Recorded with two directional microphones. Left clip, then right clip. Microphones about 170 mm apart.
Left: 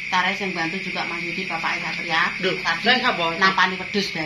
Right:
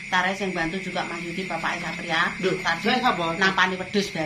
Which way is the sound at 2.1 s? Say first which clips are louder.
Left 2 dB; 30° right (ahead or behind).